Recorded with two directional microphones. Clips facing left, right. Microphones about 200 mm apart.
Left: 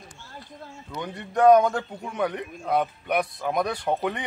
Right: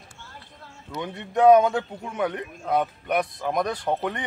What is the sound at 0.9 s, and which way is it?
A man's voice, centre (ahead or behind).